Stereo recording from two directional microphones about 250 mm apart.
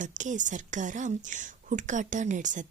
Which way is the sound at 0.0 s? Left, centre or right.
Right.